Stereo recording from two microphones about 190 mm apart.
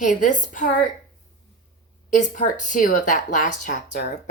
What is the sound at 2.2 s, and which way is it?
Speech, 40° left (ahead or behind).